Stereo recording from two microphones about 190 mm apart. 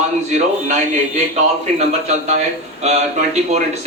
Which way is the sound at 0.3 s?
40° right (ahead or behind).